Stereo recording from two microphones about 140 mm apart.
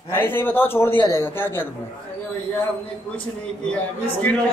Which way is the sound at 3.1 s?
10° left (ahead or behind).